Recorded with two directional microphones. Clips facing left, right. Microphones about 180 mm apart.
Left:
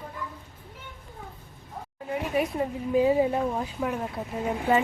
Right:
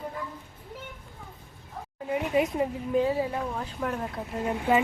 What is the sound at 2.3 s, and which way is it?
Speech, 20° right (ahead or behind).